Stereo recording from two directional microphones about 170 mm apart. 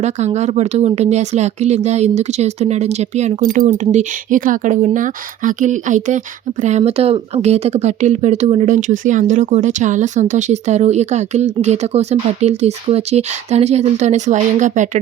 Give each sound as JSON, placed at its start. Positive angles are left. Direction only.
{"t": 0.0, "sound": "speech", "side_deg": -40}